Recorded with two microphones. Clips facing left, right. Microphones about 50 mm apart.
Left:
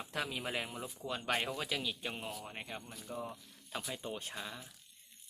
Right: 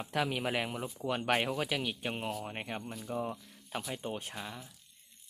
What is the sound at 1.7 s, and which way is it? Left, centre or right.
Speech, right.